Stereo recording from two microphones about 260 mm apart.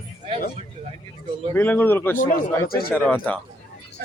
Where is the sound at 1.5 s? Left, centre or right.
Centre.